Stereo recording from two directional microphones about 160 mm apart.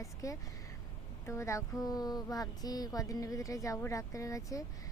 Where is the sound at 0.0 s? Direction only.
20° left (ahead or behind).